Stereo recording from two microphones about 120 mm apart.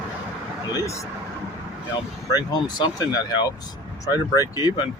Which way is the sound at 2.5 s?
35° left (ahead or behind).